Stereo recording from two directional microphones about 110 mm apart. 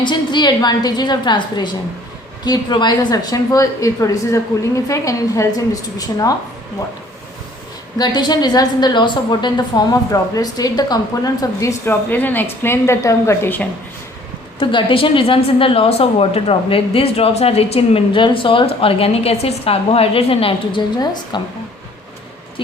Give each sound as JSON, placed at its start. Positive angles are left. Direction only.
{"t": 0.0, "sound": "a woman's voice", "side_deg": 45}
{"t": 7.9, "sound": "a woman's voice", "side_deg": 40}
{"t": 11.9, "sound": "a woman's voice", "side_deg": 20}
{"t": 14.6, "sound": "a woman's voice", "side_deg": 50}